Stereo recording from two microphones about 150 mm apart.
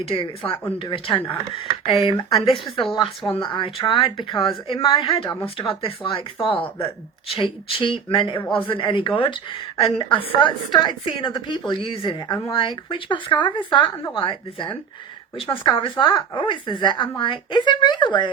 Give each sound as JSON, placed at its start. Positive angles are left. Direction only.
{"t": 0.0, "sound": "a woman's voice", "side_deg": 40}
{"t": 2.8, "sound": "speech", "side_deg": 0}
{"t": 3.4, "sound": "a woman's voice", "side_deg": 35}
{"t": 8.4, "sound": "a man's voice", "side_deg": 10}
{"t": 8.7, "sound": "a woman's voice", "side_deg": 35}